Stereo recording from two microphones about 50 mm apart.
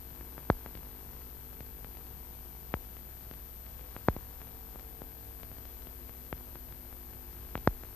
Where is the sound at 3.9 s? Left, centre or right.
Left.